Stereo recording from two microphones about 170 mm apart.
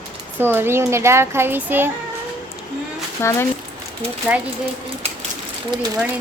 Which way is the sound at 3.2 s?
15° left (ahead or behind).